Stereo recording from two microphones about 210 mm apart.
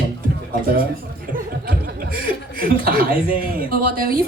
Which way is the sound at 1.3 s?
45° right (ahead or behind).